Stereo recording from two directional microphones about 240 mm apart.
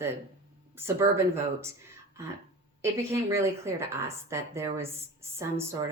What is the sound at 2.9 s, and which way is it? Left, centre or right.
Speech, centre.